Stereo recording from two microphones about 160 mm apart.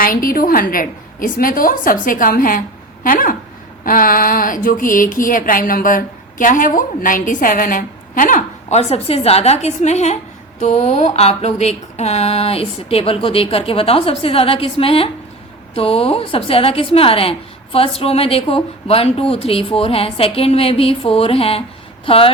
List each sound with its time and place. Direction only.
0.0 s speech: 60° left (ahead or behind); by 10.2 s 45° left (ahead or behind)
10.6 s mantra: 45° left (ahead or behind)
22.0 s speech: 35° left (ahead or behind)